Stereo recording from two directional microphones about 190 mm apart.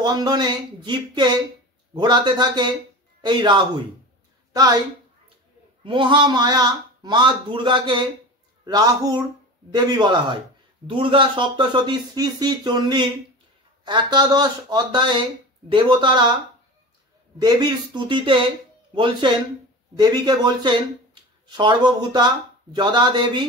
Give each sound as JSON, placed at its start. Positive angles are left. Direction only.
{"t": 0.0, "sound": "speech", "side_deg": -20}
{"t": 5.9, "sound": "speech", "side_deg": -25}
{"t": 17.4, "sound": "speech", "side_deg": -20}